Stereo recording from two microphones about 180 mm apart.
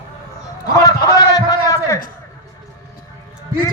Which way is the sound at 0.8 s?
20° left (ahead or behind).